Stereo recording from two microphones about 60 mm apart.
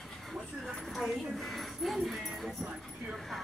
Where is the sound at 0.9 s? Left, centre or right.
Centre.